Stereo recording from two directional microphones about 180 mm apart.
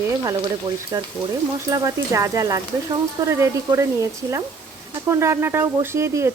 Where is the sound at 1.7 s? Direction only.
15° right (ahead or behind).